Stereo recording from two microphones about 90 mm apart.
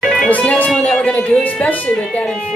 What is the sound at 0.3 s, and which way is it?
Speech, 15° left (ahead or behind).